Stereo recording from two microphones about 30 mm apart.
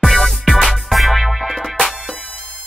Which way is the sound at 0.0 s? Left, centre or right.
Centre.